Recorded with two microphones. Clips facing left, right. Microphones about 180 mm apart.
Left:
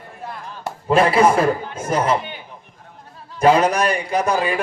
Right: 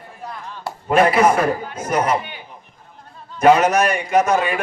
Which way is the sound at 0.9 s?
30° left (ahead or behind).